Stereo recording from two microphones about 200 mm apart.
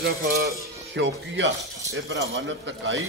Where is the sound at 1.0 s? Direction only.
65° right (ahead or behind).